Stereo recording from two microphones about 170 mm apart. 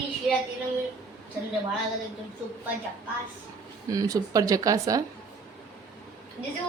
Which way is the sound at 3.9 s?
20° right (ahead or behind).